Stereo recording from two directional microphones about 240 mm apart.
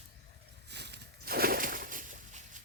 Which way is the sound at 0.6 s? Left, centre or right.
Right.